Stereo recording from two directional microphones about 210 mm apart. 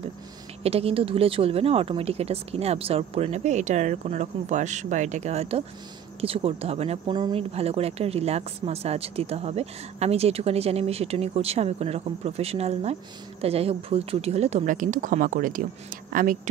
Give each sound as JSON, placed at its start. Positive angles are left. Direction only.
{"t": 0.7, "sound": "speech", "side_deg": -30}